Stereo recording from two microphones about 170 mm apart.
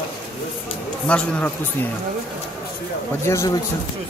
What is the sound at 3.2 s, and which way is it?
Speech, 15° left (ahead or behind).